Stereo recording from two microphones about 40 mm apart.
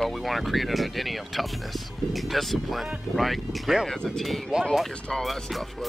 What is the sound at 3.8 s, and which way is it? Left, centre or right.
Speech, centre.